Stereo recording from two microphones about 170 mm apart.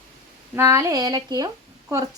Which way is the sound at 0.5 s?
15° right (ahead or behind).